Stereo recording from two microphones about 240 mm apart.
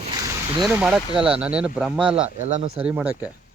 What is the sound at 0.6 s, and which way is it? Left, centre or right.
Speech, centre.